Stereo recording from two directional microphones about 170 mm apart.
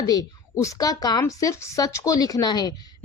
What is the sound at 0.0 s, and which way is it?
A woman's voice, 20° left (ahead or behind).